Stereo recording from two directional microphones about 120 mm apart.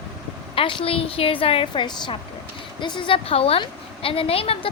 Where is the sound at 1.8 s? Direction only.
40° left (ahead or behind).